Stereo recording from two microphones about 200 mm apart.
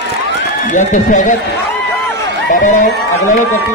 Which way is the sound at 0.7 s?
40° left (ahead or behind).